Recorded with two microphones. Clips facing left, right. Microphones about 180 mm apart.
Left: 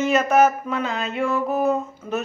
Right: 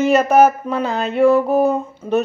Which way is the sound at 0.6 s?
35° right (ahead or behind).